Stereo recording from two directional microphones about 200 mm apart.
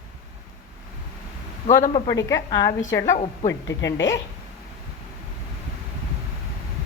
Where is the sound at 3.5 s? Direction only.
65° left (ahead or behind).